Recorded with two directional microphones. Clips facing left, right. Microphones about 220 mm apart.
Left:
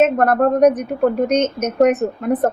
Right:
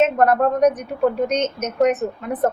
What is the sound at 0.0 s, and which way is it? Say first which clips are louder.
A woman's voice: left 2 dB; 50° left (ahead or behind).